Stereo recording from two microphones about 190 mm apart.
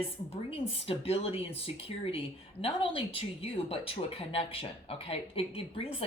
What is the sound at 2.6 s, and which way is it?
A woman's voice, 30° left (ahead or behind).